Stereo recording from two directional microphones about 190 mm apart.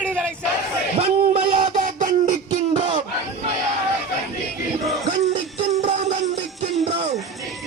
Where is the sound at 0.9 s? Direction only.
30° right (ahead or behind).